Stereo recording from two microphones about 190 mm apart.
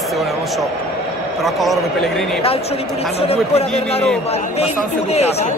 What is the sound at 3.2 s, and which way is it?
Speech, 30° left (ahead or behind).